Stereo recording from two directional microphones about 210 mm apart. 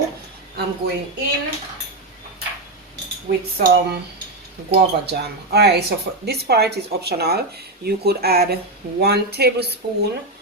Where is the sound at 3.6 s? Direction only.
45° right (ahead or behind).